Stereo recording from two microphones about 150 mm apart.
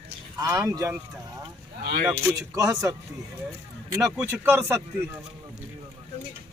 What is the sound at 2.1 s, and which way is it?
Speech, 20° right (ahead or behind).